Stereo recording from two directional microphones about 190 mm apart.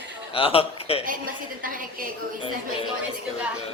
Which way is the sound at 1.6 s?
45° right (ahead or behind).